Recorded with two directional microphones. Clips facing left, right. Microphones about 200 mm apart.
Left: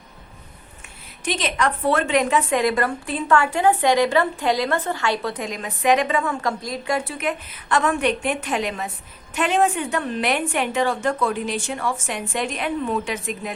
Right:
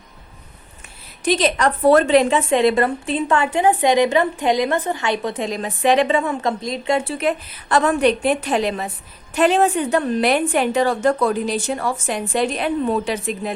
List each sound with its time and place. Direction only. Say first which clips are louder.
1.2 s a woman's voice: right 6 dB; 35° right (ahead or behind)